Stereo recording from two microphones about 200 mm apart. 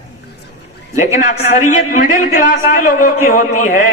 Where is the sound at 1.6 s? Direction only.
40° left (ahead or behind).